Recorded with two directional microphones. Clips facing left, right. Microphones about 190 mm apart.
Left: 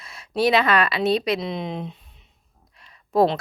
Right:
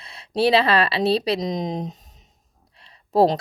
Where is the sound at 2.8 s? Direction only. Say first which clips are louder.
Right 1 dB; 30° right (ahead or behind).